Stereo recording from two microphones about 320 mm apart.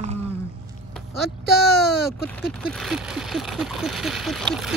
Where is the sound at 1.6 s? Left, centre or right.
Centre.